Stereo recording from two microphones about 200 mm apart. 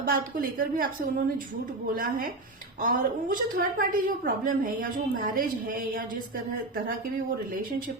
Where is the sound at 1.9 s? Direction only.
45° right (ahead or behind).